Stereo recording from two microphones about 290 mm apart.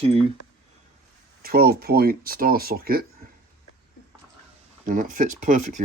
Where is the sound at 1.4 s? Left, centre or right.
Right.